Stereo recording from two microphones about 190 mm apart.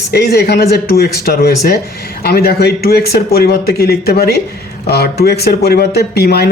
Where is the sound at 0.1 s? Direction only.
55° left (ahead or behind).